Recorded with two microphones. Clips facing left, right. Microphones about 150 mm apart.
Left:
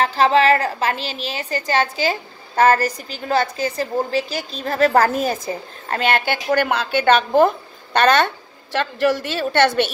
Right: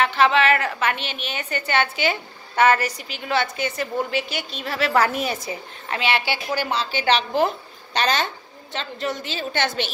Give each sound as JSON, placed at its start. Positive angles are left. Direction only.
{"t": 0.0, "sound": "a woman's voice", "side_deg": 35}